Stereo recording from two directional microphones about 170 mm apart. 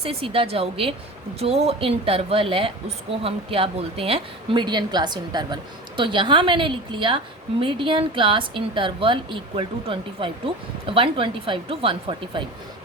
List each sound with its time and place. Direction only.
0.0 s a woman's voice: 35° right (ahead or behind)